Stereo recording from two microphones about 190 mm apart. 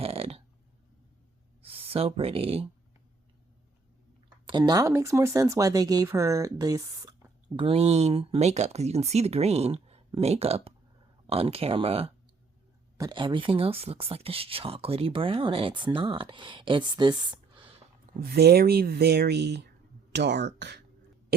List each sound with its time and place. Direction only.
0.0 s a sound: 30° right (ahead or behind)
1.6 s speech: 30° right (ahead or behind)
4.4 s speech: 20° right (ahead or behind)
18.2 s speech: 55° right (ahead or behind)